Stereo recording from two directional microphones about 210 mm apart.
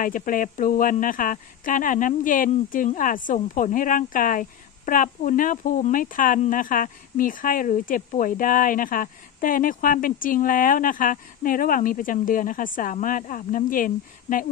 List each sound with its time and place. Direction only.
0.0 s speech: 40° left (ahead or behind)